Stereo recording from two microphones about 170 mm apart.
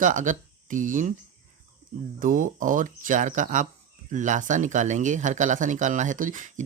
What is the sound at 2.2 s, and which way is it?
Speech, 50° right (ahead or behind).